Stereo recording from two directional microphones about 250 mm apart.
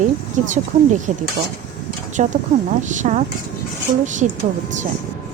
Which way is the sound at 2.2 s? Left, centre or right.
Right.